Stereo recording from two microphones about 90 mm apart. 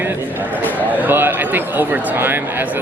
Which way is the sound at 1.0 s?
20° right (ahead or behind).